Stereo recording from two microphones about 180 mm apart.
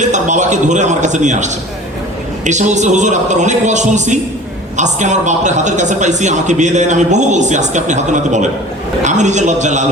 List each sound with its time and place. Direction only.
0.0 s a man's voice: 40° right (ahead or behind)